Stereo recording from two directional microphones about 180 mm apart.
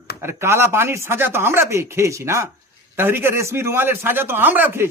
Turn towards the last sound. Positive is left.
turn(degrees=-10)  # may be behind; listen again after turning